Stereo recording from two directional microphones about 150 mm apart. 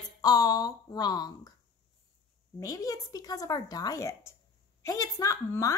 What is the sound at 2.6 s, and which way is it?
A woman's voice, 20° left (ahead or behind).